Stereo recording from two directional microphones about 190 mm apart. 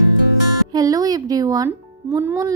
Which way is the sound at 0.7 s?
20° right (ahead or behind).